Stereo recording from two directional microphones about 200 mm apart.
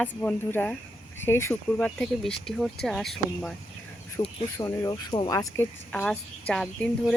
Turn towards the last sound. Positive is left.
turn(degrees=0)  # may be behind; listen again after turning